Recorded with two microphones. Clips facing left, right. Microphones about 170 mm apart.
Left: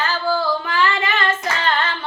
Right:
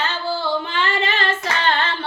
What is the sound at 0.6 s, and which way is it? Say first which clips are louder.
Female singing: left 2 dB; 25° right (ahead or behind).